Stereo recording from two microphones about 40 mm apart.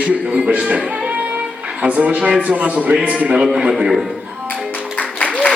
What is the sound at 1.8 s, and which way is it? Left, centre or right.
A man's voice, right.